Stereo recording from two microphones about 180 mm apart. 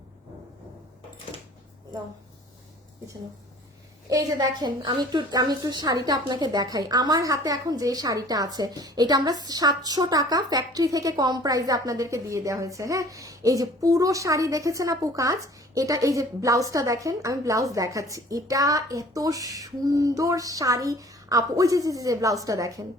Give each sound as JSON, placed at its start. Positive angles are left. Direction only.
{"t": 4.1, "sound": "a woman's voice", "side_deg": -20}